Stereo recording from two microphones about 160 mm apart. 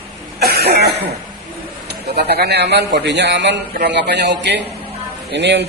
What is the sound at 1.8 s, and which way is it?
A man's voice, 90° right.